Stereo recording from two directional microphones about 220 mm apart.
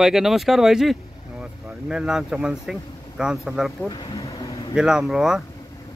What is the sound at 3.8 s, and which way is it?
Vehicle, 15° left (ahead or behind).